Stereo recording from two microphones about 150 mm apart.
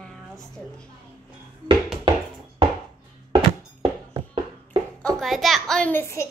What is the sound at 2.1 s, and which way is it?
Music, 35° right (ahead or behind).